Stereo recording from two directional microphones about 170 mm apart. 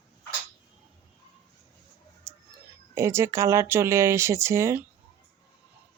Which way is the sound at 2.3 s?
15° right (ahead or behind).